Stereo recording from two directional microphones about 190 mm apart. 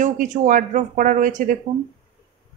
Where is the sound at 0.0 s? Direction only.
45° right (ahead or behind).